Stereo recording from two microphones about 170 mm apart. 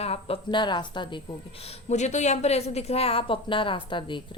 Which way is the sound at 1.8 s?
45° left (ahead or behind).